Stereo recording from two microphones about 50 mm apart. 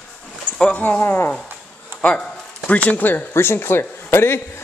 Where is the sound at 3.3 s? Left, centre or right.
Left.